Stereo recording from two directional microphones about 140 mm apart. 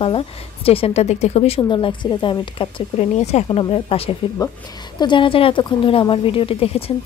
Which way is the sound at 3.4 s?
35° left (ahead or behind).